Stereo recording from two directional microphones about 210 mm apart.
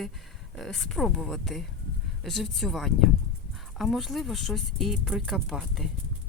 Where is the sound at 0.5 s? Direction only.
Centre (ahead or behind).